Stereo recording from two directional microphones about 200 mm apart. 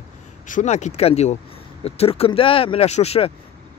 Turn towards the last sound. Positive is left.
turn(degrees=30)  # may be behind; listen again after turning